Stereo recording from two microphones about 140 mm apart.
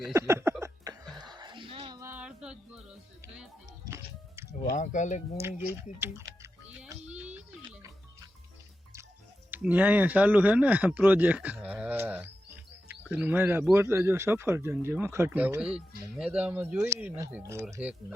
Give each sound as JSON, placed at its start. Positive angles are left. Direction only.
{"t": 0.1, "sound": "a sound", "side_deg": -20}
{"t": 2.0, "sound": "music", "side_deg": -15}
{"t": 3.8, "sound": "music", "side_deg": -20}
{"t": 4.7, "sound": "speech", "side_deg": 60}
{"t": 5.4, "sound": "music", "side_deg": -15}
{"t": 7.1, "sound": "music", "side_deg": -10}
{"t": 9.5, "sound": "speech", "side_deg": -10}